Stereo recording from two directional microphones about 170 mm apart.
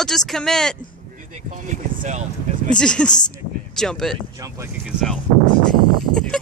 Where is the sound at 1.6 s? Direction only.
45° right (ahead or behind).